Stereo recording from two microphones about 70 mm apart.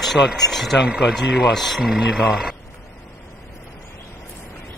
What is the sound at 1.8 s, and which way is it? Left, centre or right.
Speech, centre.